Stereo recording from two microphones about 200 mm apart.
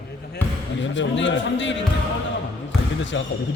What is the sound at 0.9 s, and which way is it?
Speech, 65° left (ahead or behind).